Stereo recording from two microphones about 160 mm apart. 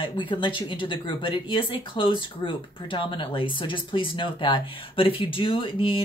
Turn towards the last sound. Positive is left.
turn(degrees=35)  # may be behind; listen again after turning